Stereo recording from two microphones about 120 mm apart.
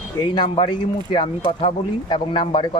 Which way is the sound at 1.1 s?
45° left (ahead or behind).